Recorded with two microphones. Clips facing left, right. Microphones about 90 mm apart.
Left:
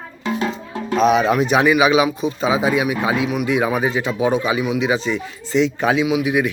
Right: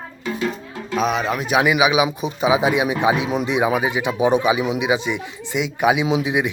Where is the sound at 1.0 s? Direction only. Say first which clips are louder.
Left 6 dB; centre (ahead or behind).